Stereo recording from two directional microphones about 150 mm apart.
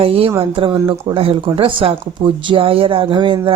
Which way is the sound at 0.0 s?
40° right (ahead or behind).